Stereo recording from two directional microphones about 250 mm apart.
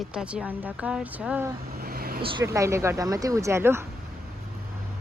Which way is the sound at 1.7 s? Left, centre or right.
Right.